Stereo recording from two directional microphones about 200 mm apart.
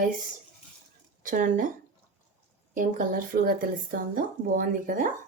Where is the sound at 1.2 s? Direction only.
40° right (ahead or behind).